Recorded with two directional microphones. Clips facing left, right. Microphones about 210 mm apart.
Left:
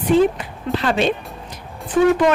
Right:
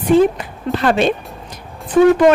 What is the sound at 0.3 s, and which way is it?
Speech, 50° right (ahead or behind).